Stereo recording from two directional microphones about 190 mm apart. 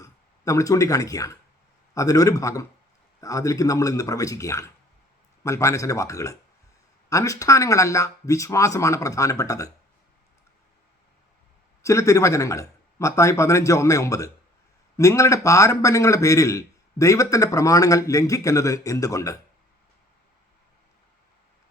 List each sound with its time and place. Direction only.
0.0 s a man's voice: 15° left (ahead or behind)
11.8 s a man's voice: 15° left (ahead or behind)